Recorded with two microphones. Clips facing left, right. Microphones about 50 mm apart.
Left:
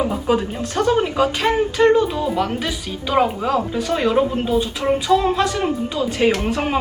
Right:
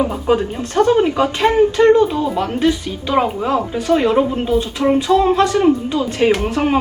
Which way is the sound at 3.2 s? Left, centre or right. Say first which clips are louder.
Right 2 dB; centre.